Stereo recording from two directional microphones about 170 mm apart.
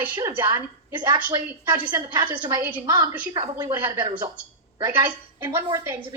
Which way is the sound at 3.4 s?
30° right (ahead or behind).